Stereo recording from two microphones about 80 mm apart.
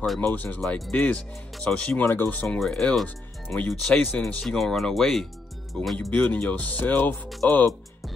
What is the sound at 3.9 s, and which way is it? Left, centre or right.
Speech, left.